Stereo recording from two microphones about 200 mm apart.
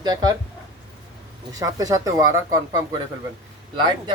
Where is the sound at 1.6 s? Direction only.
15° right (ahead or behind).